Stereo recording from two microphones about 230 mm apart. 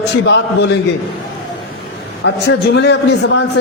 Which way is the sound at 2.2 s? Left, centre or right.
Left.